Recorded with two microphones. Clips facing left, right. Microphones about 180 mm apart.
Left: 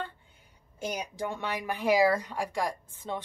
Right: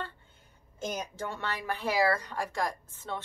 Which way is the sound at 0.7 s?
15° left (ahead or behind).